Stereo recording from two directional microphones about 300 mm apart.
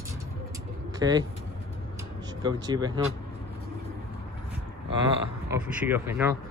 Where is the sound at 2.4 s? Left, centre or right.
Centre.